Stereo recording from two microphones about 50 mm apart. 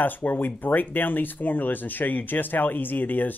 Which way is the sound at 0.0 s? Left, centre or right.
Left.